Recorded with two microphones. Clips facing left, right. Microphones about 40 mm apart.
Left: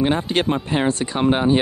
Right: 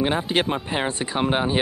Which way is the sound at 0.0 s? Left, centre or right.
Centre.